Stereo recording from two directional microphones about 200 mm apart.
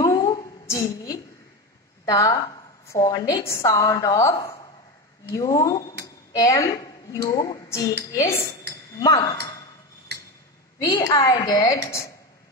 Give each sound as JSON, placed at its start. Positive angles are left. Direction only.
{"t": 0.0, "sound": "a sound", "side_deg": 15}
{"t": 2.0, "sound": "a woman's voice", "side_deg": 20}
{"t": 10.8, "sound": "a woman's voice", "side_deg": 15}